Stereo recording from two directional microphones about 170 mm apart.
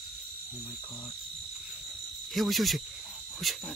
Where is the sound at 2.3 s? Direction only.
Centre (ahead or behind).